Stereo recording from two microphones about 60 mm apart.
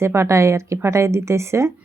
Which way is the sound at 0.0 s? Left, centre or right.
Right.